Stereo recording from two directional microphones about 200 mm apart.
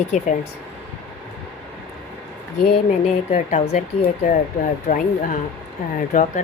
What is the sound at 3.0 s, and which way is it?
Speech, 35° left (ahead or behind).